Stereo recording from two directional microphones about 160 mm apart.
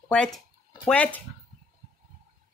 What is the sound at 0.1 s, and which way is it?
Speech, 5° left (ahead or behind).